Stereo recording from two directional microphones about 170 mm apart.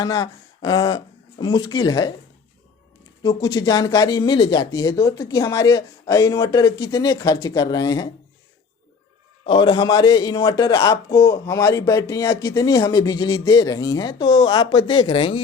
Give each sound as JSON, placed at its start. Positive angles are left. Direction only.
{"t": 0.0, "sound": "speech", "side_deg": 25}
{"t": 3.2, "sound": "a man's voice", "side_deg": 20}
{"t": 9.5, "sound": "a man's voice", "side_deg": 25}